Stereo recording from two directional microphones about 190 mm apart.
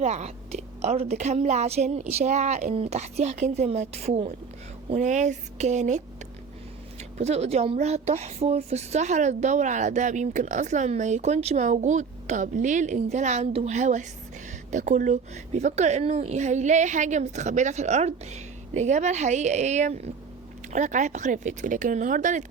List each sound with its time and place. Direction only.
0.0 s a woman's voice: 35° right (ahead or behind)
7.2 s a woman's voice: 35° right (ahead or behind)